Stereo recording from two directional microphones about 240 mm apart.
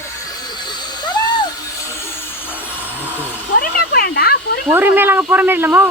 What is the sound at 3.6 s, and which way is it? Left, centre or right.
Snake, left.